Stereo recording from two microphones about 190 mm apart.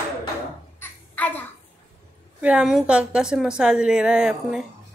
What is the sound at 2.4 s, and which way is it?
A woman's voice, 5° right (ahead or behind).